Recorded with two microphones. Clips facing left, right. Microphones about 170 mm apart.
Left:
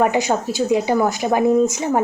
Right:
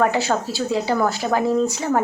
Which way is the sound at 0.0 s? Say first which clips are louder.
Left 2 dB; 15° left (ahead or behind).